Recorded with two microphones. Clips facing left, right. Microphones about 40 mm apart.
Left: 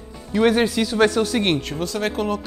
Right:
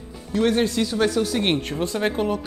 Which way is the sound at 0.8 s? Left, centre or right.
Left.